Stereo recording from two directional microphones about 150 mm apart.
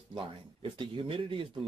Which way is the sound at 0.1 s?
35° right (ahead or behind).